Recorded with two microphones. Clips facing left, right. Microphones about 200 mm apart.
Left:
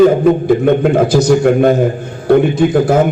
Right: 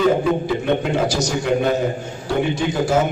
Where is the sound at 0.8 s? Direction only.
55° left (ahead or behind).